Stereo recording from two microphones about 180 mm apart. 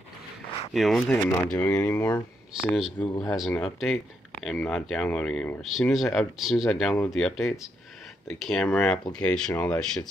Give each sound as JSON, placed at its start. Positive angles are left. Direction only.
{"t": 0.7, "sound": "speech", "side_deg": 0}
{"t": 2.7, "sound": "speech", "side_deg": 0}
{"t": 3.1, "sound": "speech", "side_deg": 20}
{"t": 3.3, "sound": "speech", "side_deg": 5}